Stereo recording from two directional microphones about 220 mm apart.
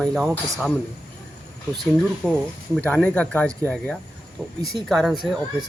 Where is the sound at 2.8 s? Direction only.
5° left (ahead or behind).